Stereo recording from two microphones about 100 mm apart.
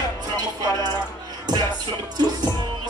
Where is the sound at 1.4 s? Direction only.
45° right (ahead or behind).